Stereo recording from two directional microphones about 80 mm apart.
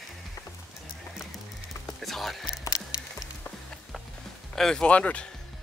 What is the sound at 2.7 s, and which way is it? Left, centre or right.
Music, left.